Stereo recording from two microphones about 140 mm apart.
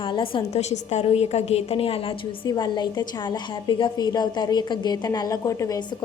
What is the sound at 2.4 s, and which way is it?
A woman's voice, 30° left (ahead or behind).